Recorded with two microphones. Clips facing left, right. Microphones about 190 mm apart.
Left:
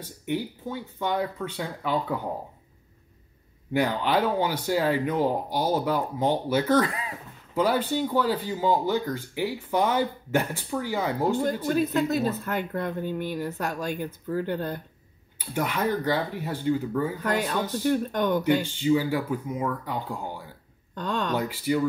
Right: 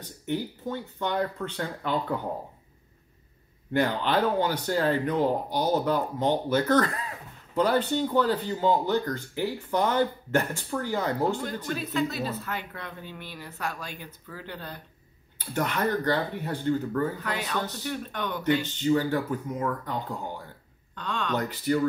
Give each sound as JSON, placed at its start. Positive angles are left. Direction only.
{"t": 0.3, "sound": "speech", "side_deg": 10}
{"t": 3.7, "sound": "speech", "side_deg": 10}
{"t": 11.7, "sound": "speech", "side_deg": 45}
{"t": 15.3, "sound": "speech", "side_deg": 10}
{"t": 17.2, "sound": "speech", "side_deg": 45}
{"t": 17.6, "sound": "speech", "side_deg": 10}
{"t": 17.8, "sound": "speech", "side_deg": 45}
{"t": 18.6, "sound": "speech", "side_deg": 10}
{"t": 20.9, "sound": "speech", "side_deg": 40}
{"t": 21.4, "sound": "speech", "side_deg": 10}